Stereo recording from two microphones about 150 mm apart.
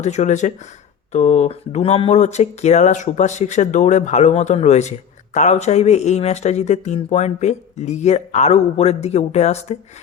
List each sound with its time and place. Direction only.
0.0 s speech: 50° left (ahead or behind)